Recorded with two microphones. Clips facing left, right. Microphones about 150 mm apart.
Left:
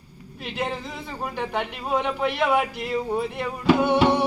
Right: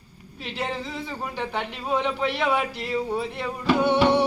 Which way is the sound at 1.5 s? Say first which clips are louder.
Left 1 dB; 10° left (ahead or behind).